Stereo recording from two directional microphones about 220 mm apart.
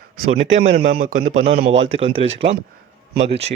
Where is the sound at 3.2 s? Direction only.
30° right (ahead or behind).